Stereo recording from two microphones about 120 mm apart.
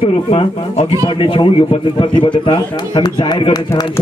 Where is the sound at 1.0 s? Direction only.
45° left (ahead or behind).